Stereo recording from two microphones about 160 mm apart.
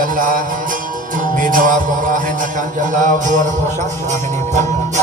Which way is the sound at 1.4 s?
55° right (ahead or behind).